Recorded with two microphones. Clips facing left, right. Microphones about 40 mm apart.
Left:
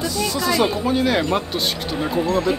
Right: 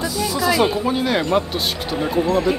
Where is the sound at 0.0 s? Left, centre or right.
Centre.